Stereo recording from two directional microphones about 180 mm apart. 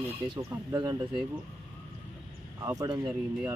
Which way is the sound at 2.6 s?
20° right (ahead or behind).